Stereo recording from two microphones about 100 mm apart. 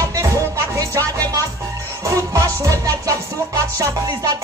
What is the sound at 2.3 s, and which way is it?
Music, 35° right (ahead or behind).